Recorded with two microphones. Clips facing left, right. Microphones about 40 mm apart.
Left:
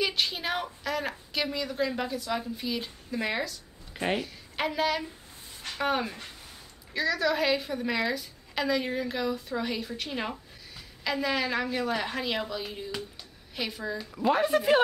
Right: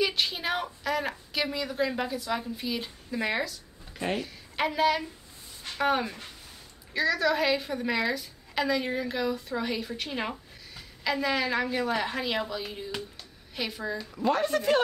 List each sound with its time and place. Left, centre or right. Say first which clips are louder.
0.0 s a woman's voice: right 1 dB; centre
3.9 s a sound: left 2 dB; centre
4.2 s a woman's voice: right 2 dB; centre